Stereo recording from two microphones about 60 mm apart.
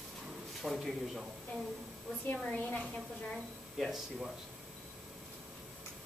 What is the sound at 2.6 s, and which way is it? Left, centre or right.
Speech, left.